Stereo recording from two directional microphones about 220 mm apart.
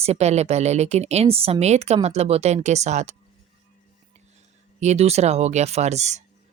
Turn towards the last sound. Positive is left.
turn(degrees=-30)  # may be behind; listen again after turning